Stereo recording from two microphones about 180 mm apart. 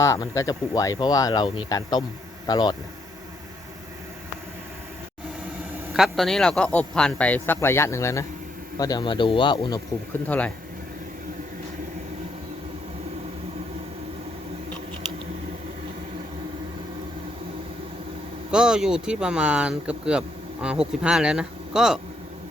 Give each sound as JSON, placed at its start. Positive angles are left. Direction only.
{"t": 0.0, "sound": "speech", "side_deg": 15}
{"t": 5.9, "sound": "speech", "side_deg": 0}
{"t": 10.2, "sound": "speech", "side_deg": 10}
{"t": 18.5, "sound": "speech", "side_deg": -5}